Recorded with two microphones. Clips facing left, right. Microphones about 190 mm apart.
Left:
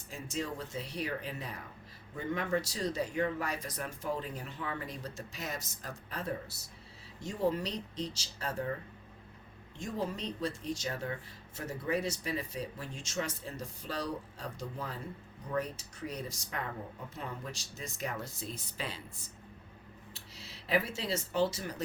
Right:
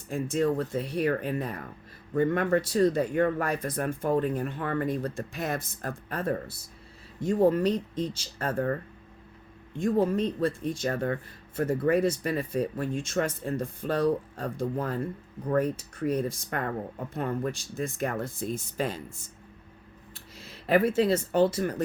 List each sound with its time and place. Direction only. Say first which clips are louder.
0.1 s speech: right 12 dB; 55° right (ahead or behind)